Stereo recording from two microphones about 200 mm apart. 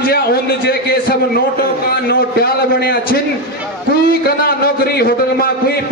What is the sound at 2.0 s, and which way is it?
A man's voice, 50° left (ahead or behind).